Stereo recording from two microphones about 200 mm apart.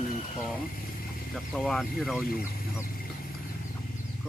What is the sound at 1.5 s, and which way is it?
Speech, centre (ahead or behind).